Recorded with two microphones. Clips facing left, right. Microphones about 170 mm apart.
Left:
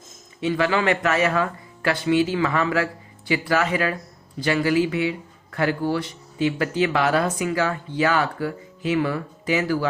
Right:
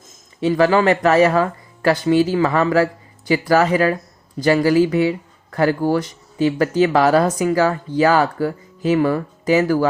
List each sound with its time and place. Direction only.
0.3 s speech: 35° right (ahead or behind)